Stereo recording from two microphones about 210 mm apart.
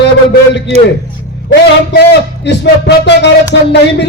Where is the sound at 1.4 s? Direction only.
55° left (ahead or behind).